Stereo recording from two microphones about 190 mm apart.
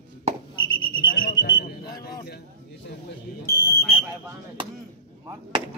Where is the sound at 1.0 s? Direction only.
50° left (ahead or behind).